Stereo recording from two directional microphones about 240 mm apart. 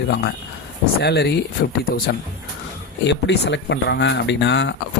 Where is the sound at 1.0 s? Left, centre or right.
Left.